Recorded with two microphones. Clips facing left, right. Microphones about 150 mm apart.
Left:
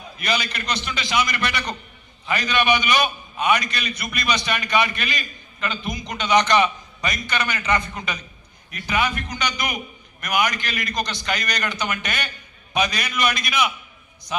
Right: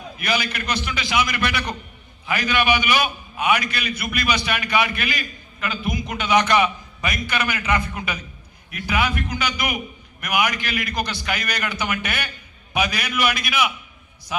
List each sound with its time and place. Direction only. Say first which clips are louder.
0.2 s a man's voice: right 1 dB; 5° right (ahead or behind)